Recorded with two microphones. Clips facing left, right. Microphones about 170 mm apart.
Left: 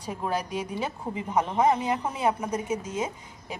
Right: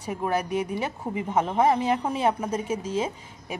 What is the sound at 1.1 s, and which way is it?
A woman's voice, 25° right (ahead or behind).